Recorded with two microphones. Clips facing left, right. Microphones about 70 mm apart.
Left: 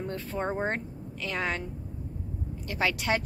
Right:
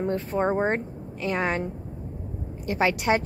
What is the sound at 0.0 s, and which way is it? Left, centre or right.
Speech, right.